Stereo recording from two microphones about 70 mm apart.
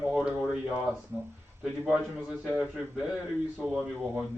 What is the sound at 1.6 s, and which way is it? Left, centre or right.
Speech, centre.